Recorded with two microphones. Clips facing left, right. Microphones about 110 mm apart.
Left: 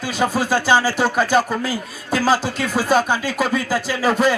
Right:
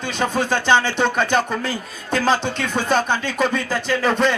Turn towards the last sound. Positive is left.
turn(degrees=5)  # may be behind; listen again after turning